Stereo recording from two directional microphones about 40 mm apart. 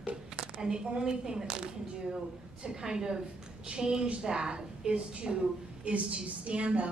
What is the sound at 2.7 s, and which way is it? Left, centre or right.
A woman's voice, centre.